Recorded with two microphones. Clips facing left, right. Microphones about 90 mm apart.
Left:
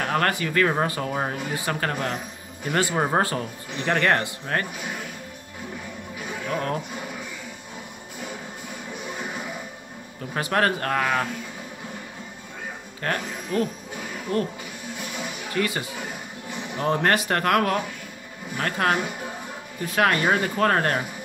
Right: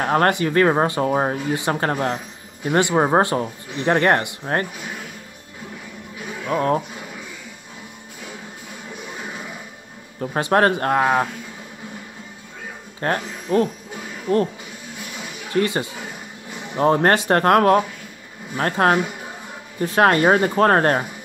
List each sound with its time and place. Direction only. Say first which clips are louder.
0.0 s speech: right 6 dB; 30° right (ahead or behind)
6.5 s speech: right 8 dB; 35° right (ahead or behind)
10.3 s speech: right 5 dB; 30° right (ahead or behind)
13.0 s speech: right 5 dB; 35° right (ahead or behind)
15.5 s speech: right 6 dB; 30° right (ahead or behind)